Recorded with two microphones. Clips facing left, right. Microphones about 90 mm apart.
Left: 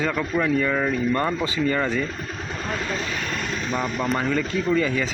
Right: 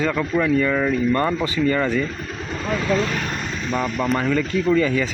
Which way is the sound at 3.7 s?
5° left (ahead or behind).